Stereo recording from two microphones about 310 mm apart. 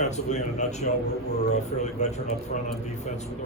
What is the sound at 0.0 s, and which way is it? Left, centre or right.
A man's voice, left.